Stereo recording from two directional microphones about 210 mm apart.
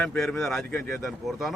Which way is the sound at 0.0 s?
5° left (ahead or behind).